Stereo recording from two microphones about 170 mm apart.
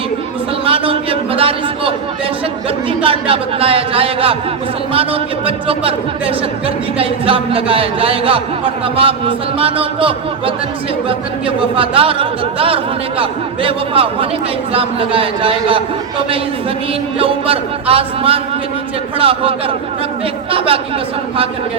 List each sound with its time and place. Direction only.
0.6 s a man's voice: 35° right (ahead or behind)
3.0 s speech: 30° right (ahead or behind)
17.2 s speech: 35° right (ahead or behind)